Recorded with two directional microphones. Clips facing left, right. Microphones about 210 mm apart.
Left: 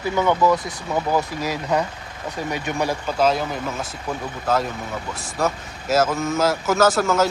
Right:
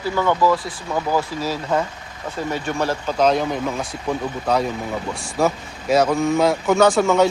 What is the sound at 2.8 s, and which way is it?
Speech, 10° left (ahead or behind).